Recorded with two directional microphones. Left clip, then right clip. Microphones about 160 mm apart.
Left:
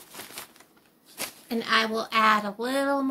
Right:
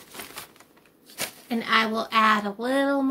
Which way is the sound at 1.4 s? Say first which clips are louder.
Right 2 dB; 40° left (ahead or behind).